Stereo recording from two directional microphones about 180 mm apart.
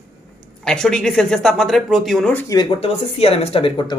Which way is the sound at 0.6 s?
5° left (ahead or behind).